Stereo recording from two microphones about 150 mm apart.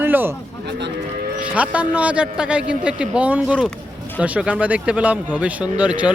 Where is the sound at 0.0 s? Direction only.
15° right (ahead or behind).